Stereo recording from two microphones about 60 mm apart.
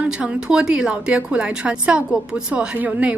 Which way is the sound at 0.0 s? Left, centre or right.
Centre.